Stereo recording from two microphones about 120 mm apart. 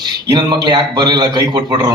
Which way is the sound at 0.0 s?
35° right (ahead or behind).